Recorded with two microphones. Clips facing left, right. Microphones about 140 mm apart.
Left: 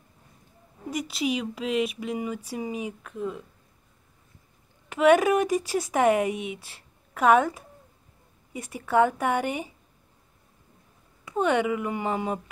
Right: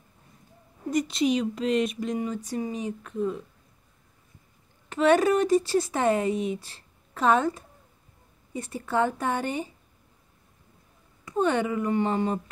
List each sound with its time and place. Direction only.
0.8 s speech: 5° left (ahead or behind)
4.8 s speech: 10° left (ahead or behind)
6.3 s speech: 35° right (ahead or behind)
6.6 s speech: 10° left (ahead or behind)
11.2 s speech: 10° left (ahead or behind)